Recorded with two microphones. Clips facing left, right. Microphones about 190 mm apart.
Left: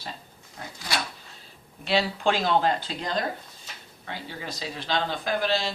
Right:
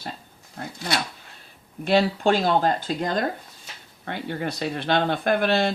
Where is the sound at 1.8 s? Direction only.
50° right (ahead or behind).